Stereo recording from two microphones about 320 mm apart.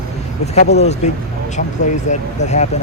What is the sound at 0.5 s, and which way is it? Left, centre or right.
Speech, left.